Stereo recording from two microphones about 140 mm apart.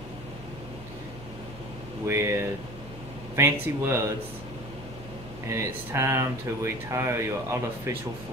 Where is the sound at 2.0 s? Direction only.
20° right (ahead or behind).